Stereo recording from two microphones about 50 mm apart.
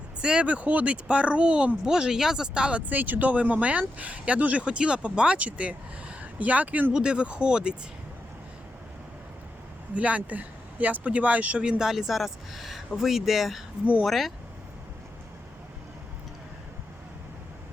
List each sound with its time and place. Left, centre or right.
0.2 s speech: centre
2.8 s speech: right
6.9 s speech: centre
9.9 s speech: right
11.6 s speech: centre